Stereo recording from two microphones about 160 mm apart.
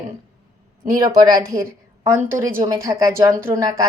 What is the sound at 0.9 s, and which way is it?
A woman's voice, 25° right (ahead or behind).